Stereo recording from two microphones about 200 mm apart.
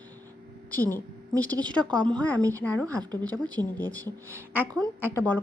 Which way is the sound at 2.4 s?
15° right (ahead or behind).